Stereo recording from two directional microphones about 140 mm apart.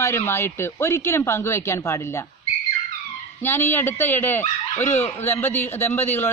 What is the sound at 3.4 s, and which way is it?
A man's voice, 15° left (ahead or behind).